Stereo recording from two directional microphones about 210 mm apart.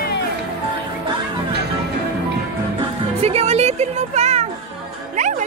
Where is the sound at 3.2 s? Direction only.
30° right (ahead or behind).